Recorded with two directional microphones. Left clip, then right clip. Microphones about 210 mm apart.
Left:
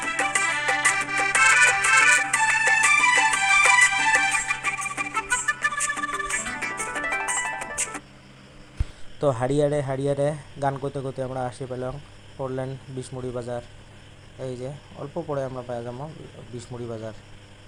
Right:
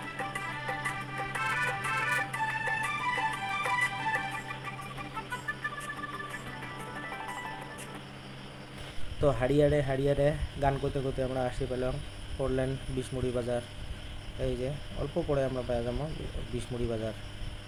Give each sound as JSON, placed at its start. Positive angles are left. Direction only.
{"t": 0.0, "sound": "music", "side_deg": 35}
{"t": 9.2, "sound": "speech", "side_deg": 25}